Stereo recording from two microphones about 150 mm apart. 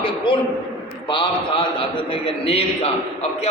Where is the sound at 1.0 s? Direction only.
35° left (ahead or behind).